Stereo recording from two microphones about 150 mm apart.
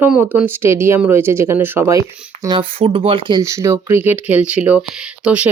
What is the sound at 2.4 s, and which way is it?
Speech, 30° right (ahead or behind).